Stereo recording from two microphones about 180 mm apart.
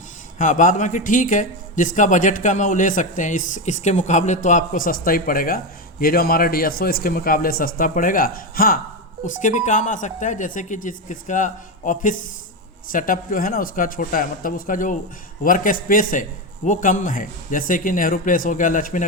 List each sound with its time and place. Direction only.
0.3 s speech: 45° left (ahead or behind)